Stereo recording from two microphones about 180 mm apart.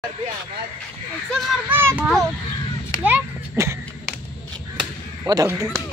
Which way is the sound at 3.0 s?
10° right (ahead or behind).